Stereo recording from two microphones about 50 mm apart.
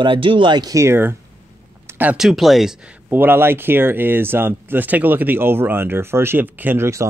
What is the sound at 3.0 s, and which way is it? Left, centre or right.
Speech, right.